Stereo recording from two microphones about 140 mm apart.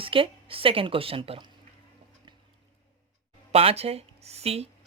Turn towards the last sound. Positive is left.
turn(degrees=-45)  # may be behind; listen again after turning